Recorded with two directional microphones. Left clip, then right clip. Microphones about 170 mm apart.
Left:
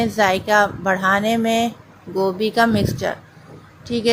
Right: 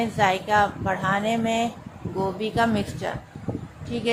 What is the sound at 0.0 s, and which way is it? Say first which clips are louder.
A woman's voice: left 4 dB; 30° left (ahead or behind).